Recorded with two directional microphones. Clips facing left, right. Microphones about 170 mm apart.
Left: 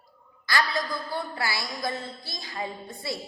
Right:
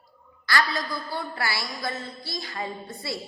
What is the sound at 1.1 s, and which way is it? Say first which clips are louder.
A woman's voice: right 1 dB; 15° left (ahead or behind).